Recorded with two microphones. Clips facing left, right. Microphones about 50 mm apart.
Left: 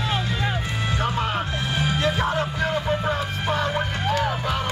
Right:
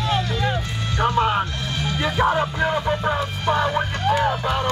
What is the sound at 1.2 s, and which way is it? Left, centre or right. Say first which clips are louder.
Music: right 5 dB; centre.